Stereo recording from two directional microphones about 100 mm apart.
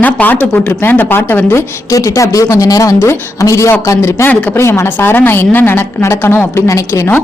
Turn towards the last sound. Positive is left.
turn(degrees=30)  # may be behind; listen again after turning